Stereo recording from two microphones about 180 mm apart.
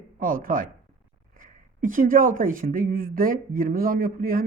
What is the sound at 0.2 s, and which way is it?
Speech, 50° right (ahead or behind).